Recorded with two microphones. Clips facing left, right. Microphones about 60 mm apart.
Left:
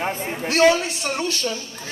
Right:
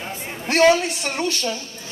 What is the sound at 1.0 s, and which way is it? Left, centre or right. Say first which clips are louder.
Speech: left 1 dB; right.